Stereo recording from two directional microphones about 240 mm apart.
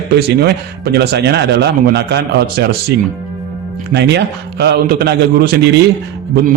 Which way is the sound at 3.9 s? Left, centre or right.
Right.